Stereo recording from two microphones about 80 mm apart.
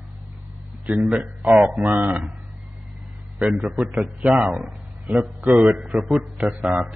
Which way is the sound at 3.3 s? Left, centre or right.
Centre.